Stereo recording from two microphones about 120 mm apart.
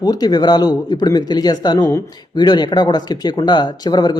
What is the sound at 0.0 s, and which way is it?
Speech, 35° left (ahead or behind).